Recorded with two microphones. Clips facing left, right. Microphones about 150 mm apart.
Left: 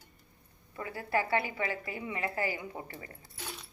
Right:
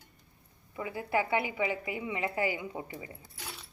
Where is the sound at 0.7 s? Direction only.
15° right (ahead or behind).